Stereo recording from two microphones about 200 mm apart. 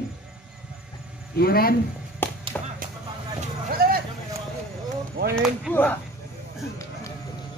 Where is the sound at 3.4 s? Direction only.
45° right (ahead or behind).